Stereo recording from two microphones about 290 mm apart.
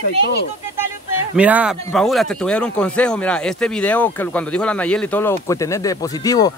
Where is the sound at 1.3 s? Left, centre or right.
Centre.